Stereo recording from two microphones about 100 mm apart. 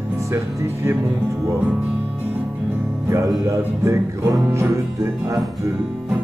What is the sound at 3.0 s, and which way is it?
Speech, 30° right (ahead or behind).